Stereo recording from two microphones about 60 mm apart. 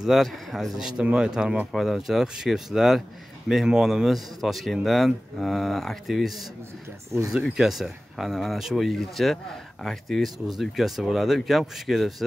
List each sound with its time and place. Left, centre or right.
0.0 s speech: centre
0.8 s speech: centre
7.1 s speech: right
7.5 s speech: centre